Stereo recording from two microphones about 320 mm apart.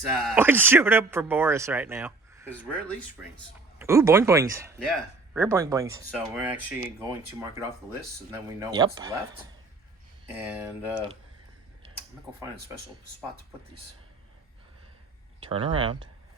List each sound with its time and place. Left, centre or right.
0.2 s speech: centre
8.3 s speech: centre
10.2 s speech: centre
15.4 s speech: centre